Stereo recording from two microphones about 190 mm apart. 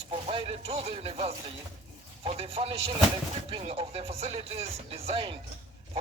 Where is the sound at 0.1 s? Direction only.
30° right (ahead or behind).